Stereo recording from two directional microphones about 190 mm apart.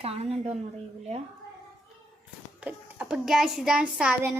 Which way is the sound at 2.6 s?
5° right (ahead or behind).